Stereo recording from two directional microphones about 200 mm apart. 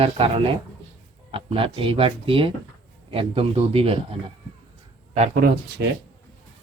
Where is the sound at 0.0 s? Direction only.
30° right (ahead or behind).